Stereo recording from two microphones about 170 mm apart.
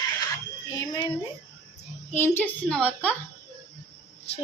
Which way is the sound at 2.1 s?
15° left (ahead or behind).